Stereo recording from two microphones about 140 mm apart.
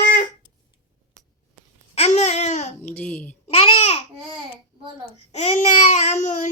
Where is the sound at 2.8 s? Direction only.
10° left (ahead or behind).